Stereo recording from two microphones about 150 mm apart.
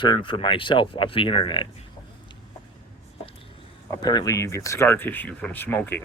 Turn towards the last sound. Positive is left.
turn(degrees=15)  # may be behind; listen again after turning